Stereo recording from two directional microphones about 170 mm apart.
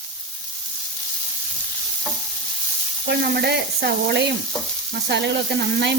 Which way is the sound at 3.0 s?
75° right (ahead or behind).